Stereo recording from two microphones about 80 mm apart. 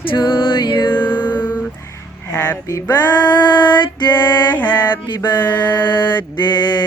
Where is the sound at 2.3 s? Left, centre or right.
Centre.